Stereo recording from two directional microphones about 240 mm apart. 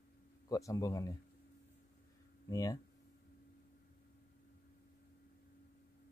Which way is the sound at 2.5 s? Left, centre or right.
Centre.